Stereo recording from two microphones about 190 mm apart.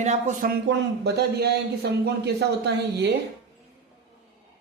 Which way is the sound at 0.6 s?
65° right (ahead or behind).